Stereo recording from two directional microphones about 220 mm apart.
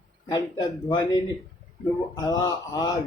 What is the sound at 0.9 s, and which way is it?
A man's voice, 20° left (ahead or behind).